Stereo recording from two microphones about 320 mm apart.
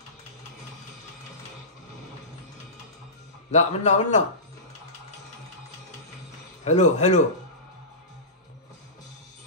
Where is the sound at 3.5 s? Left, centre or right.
Left.